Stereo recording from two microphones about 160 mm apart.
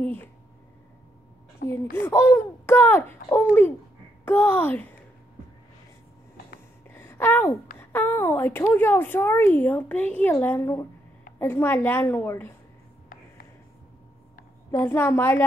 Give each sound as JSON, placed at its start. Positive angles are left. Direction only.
{"t": 0.0, "sound": "speech", "side_deg": 10}
{"t": 1.6, "sound": "speech", "side_deg": 55}
{"t": 2.0, "sound": "speech", "side_deg": 15}
{"t": 6.9, "sound": "a sound", "side_deg": 15}
{"t": 7.9, "sound": "speech", "side_deg": 15}
{"t": 14.7, "sound": "speech", "side_deg": 15}